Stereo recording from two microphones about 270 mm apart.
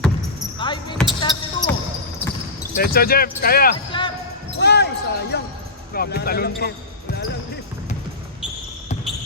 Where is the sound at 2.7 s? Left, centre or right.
Left.